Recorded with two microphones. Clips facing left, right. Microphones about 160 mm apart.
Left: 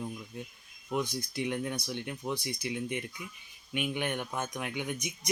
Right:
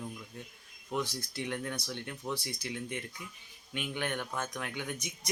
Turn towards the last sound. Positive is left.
turn(degrees=15)  # may be behind; listen again after turning